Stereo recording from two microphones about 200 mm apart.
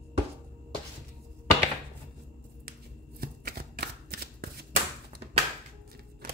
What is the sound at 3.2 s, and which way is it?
Shuffling cards, 50° right (ahead or behind).